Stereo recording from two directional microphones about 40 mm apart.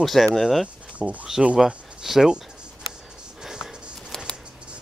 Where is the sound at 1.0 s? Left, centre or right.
Right.